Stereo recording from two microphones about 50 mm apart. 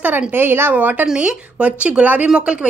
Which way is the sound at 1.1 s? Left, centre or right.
Right.